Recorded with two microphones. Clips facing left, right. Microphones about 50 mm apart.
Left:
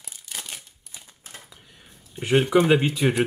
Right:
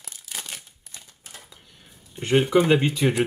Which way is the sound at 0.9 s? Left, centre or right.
Centre.